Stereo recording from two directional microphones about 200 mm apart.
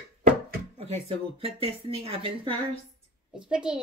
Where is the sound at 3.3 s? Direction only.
5° right (ahead or behind).